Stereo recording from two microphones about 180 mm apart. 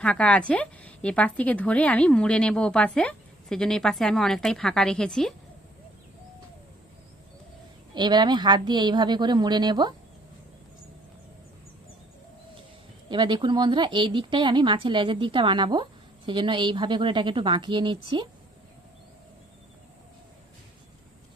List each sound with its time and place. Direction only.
0.0 s a woman's voice: 5° left (ahead or behind)
7.9 s speech: 25° right (ahead or behind)
13.1 s speech: 25° right (ahead or behind)